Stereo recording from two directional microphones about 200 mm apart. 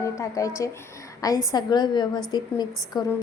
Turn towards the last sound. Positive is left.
turn(degrees=20)  # may be behind; listen again after turning